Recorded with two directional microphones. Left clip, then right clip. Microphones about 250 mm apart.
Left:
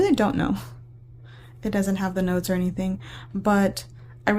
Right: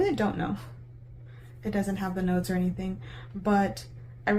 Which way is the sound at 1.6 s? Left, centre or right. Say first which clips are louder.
Left 5 dB; left.